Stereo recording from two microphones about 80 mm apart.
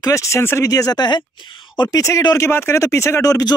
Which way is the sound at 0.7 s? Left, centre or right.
Left.